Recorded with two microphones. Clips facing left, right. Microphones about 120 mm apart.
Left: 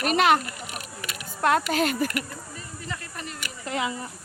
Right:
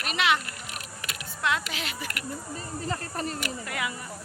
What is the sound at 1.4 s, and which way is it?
Speech, 45° left (ahead or behind).